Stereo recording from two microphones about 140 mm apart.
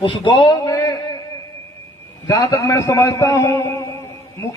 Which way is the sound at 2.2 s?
25° left (ahead or behind).